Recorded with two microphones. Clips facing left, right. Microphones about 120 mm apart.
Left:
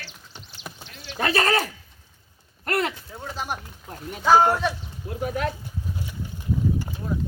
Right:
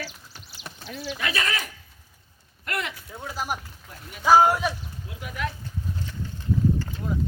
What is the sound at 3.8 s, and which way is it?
Speech, 45° left (ahead or behind).